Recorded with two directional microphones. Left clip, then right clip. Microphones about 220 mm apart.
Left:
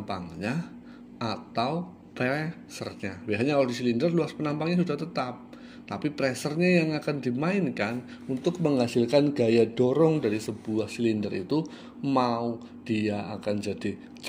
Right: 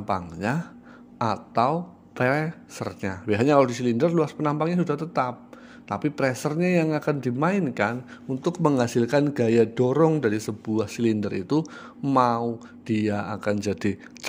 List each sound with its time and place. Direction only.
0.0 s a man's voice: 45° right (ahead or behind)